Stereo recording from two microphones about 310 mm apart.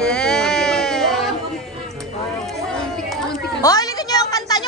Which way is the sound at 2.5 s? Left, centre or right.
Centre.